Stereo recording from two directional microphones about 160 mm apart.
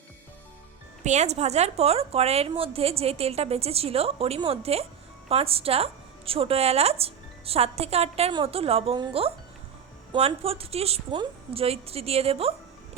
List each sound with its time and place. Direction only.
1.0 s a woman's voice: 45° right (ahead or behind)